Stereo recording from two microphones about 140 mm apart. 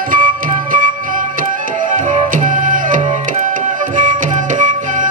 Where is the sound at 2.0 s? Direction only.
65° right (ahead or behind).